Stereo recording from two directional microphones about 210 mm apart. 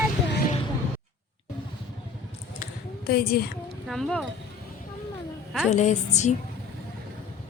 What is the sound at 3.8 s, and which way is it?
Speech, centre (ahead or behind).